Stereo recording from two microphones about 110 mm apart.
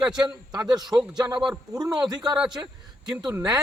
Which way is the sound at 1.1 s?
40° right (ahead or behind).